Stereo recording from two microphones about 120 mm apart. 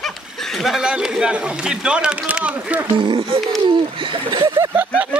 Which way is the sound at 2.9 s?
45° right (ahead or behind).